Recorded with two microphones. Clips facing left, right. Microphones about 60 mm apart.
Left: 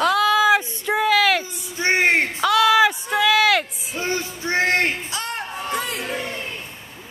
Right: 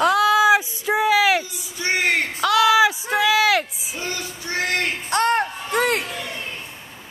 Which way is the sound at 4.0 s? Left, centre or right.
Left.